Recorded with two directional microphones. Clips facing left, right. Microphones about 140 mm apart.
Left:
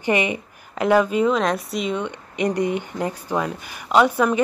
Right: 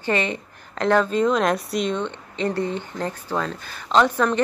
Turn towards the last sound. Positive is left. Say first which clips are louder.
# left 2 dB
turn(degrees=10)  # may be behind; listen again after turning